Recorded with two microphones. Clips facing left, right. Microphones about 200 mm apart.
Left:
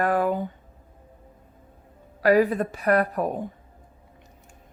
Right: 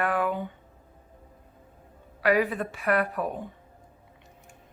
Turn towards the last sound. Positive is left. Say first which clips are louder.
# left 4 dB
turn(degrees=40)  # may be behind; listen again after turning